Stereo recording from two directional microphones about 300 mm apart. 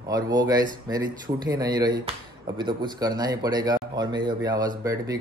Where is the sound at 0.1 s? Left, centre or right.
Centre.